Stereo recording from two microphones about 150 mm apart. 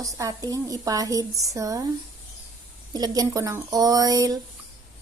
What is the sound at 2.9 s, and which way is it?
A woman's voice, 25° right (ahead or behind).